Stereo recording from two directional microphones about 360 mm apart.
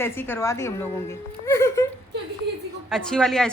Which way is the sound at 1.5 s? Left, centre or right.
Centre.